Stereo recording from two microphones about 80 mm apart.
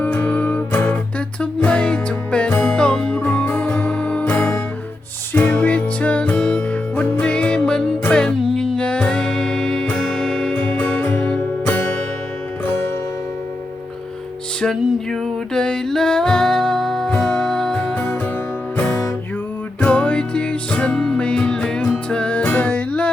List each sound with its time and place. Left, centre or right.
0.0 s music: left
14.6 s music: centre
19.8 s music: centre